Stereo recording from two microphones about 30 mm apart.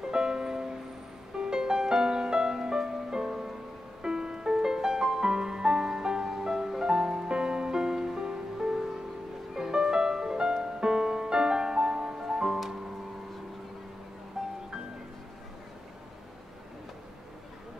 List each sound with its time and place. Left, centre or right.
0.1 s music: right
9.8 s music: right
14.4 s music: centre